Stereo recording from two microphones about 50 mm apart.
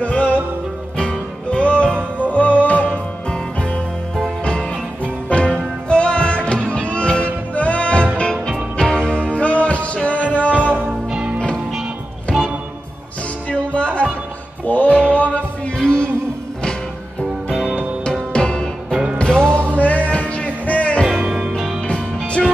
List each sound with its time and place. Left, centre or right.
0.0 s music: left
2.0 s music: right
2.3 s music: left
5.3 s music: left
11.1 s music: centre
12.3 s music: centre
13.5 s music: left
14.7 s music: left
18.3 s music: centre
21.3 s music: centre
21.8 s music: left